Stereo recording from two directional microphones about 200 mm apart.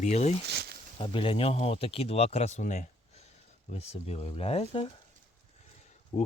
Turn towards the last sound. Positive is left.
turn(degrees=30)  # may be behind; listen again after turning